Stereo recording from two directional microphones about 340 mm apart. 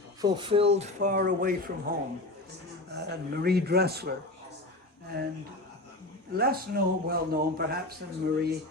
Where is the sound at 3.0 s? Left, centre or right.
Right.